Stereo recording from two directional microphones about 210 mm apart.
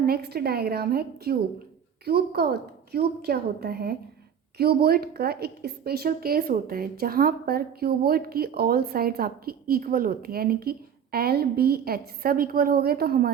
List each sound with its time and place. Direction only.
0.0 s a woman's voice: 50° right (ahead or behind)